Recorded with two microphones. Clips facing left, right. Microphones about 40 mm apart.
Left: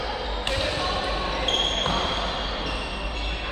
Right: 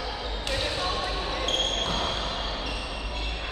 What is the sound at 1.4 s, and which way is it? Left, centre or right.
Basketball bounce, left.